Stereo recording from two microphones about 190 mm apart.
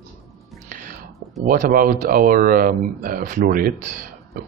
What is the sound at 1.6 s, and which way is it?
Speech, 50° right (ahead or behind).